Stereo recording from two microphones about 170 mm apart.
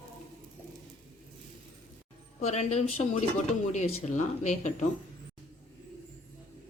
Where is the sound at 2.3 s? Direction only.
40° left (ahead or behind).